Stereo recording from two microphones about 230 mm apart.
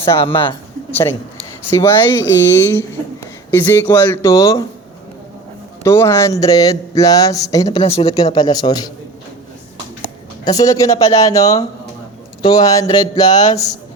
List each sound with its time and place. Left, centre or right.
0.0 s speech: left
1.7 s speech: centre
5.8 s speech: centre
10.4 s speech: centre